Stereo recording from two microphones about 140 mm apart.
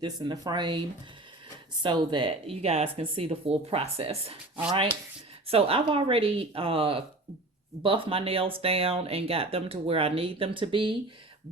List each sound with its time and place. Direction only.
0.0 s speech: 30° right (ahead or behind)